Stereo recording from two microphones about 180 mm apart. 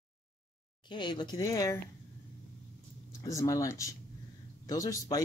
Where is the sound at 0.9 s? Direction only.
25° left (ahead or behind).